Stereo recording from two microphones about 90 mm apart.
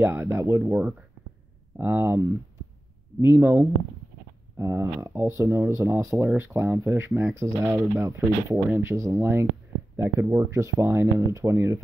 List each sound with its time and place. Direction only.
0.0 s speech: 25° right (ahead or behind)